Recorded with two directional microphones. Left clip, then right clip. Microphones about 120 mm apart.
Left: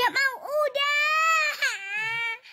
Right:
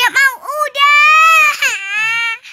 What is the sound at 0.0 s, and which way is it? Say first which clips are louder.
Baby cry: right 12 dB; 25° left (ahead or behind).